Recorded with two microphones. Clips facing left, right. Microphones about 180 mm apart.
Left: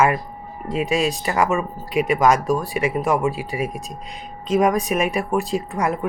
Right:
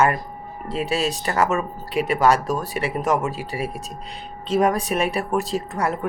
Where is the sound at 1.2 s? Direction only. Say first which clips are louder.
Left 1 dB; 10° left (ahead or behind).